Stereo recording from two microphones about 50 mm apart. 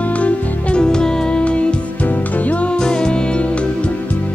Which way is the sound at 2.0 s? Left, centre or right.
Left.